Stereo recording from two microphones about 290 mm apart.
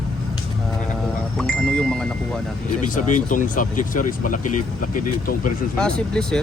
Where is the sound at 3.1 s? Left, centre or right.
Left.